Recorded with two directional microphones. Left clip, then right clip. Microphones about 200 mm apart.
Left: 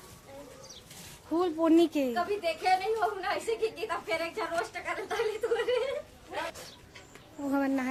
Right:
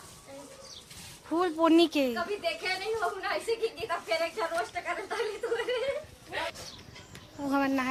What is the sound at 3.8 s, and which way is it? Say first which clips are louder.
A woman's voice: right 2 dB; 45° left (ahead or behind).